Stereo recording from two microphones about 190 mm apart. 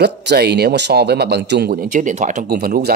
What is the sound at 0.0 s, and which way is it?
Speech, 60° right (ahead or behind).